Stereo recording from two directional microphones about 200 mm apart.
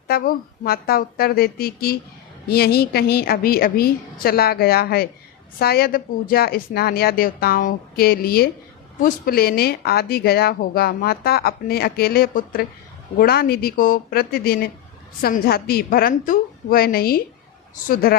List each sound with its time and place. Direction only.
0.1 s speech: 50° left (ahead or behind)